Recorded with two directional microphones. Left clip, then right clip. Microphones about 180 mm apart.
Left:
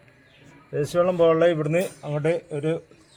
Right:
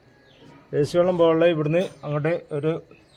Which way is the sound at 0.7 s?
45° right (ahead or behind).